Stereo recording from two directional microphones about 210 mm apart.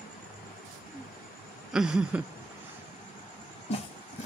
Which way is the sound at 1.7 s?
5° right (ahead or behind).